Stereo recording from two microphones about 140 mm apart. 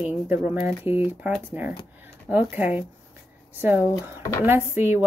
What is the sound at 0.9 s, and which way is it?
Speech, 45° left (ahead or behind).